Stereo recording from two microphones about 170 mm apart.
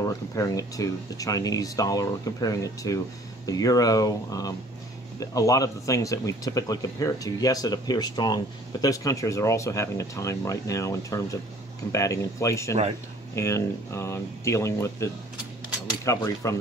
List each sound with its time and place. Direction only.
0.3 s speech: 20° left (ahead or behind)
16.1 s speech: 20° left (ahead or behind)